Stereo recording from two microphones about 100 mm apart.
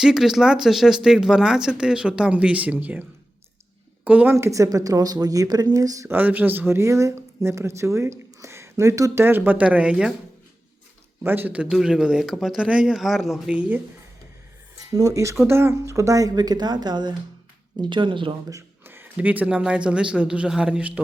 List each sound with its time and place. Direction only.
0.0 s speech: 5° right (ahead or behind)
4.0 s speech: 15° right (ahead or behind)
4.4 s speech: 30° right (ahead or behind)
6.1 s speech: 20° right (ahead or behind)
9.2 s speech: 20° right (ahead or behind)
11.2 s speech: 20° right (ahead or behind); by 13.4 s centre (ahead or behind)
13.5 s speech: 15° right (ahead or behind)
14.9 s speech: 35° right (ahead or behind); by 18.3 s 55° right (ahead or behind)
18.9 s speech: 20° right (ahead or behind)